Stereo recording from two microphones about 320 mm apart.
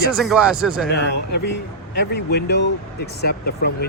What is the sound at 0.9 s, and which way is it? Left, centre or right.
Speech, left.